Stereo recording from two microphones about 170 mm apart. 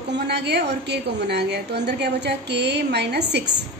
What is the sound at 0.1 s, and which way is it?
A woman's voice, 80° right.